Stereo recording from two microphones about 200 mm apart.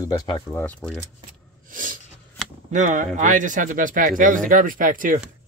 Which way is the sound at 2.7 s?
35° right (ahead or behind).